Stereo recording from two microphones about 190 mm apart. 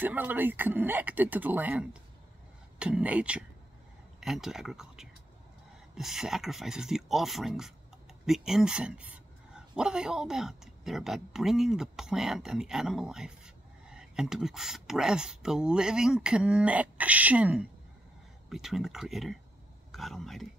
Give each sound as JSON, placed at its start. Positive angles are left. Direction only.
{"t": 0.0, "sound": "speech", "side_deg": -10}